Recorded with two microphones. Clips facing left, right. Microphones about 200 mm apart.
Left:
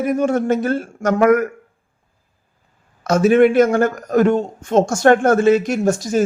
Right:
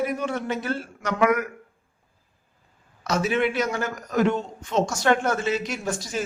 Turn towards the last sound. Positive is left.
turn(degrees=45)  # may be behind; listen again after turning